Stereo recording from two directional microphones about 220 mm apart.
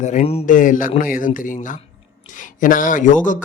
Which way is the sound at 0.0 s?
30° left (ahead or behind).